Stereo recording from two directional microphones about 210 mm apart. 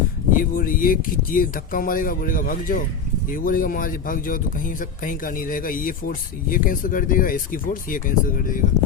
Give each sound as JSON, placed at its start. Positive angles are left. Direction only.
{"t": 0.3, "sound": "speech", "side_deg": 40}